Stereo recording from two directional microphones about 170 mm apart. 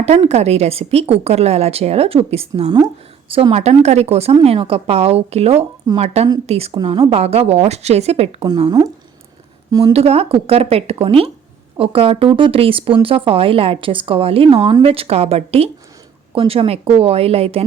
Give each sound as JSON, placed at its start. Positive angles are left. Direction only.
{"t": 0.0, "sound": "a woman's voice", "side_deg": -40}
{"t": 5.9, "sound": "speech", "side_deg": -20}
{"t": 6.4, "sound": "a woman's voice", "side_deg": -35}
{"t": 8.4, "sound": "speech", "side_deg": -25}
{"t": 9.9, "sound": "a woman's voice", "side_deg": -35}